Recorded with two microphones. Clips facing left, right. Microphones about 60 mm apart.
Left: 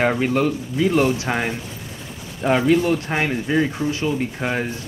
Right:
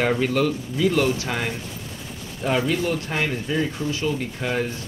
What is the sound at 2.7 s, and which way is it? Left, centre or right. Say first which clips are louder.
Speech: left 6 dB; left.